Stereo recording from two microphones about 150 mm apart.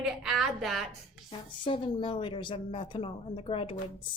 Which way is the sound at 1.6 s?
35° left (ahead or behind).